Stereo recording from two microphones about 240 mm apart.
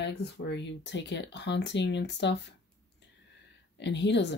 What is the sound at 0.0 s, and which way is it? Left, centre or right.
Speech, left.